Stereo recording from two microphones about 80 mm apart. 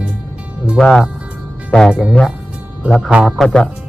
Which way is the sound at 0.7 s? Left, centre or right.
Centre.